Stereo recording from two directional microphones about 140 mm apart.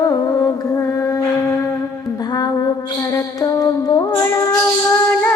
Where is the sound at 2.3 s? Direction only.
30° left (ahead or behind).